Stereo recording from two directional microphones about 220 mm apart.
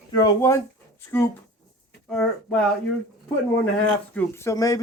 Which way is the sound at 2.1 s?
5° left (ahead or behind).